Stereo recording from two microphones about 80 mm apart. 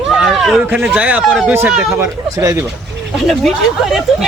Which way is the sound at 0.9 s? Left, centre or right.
Centre.